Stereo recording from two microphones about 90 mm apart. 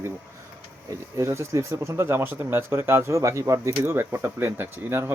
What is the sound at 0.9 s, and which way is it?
Speech, 35° right (ahead or behind).